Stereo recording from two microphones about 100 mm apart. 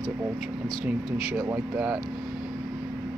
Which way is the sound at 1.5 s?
15° right (ahead or behind).